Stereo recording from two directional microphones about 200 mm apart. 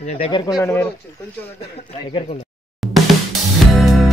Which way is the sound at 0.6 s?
10° left (ahead or behind).